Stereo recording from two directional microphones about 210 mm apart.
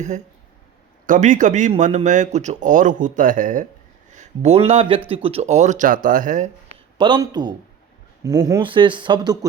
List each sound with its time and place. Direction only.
1.0 s speech: 35° right (ahead or behind)
7.0 s speech: 20° right (ahead or behind)